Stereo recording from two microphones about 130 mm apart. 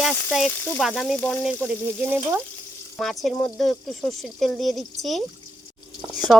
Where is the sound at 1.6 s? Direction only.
15° right (ahead or behind).